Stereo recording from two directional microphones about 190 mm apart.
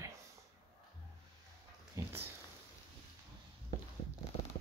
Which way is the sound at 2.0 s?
15° right (ahead or behind).